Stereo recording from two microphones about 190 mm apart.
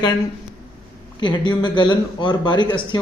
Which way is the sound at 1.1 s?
25° left (ahead or behind).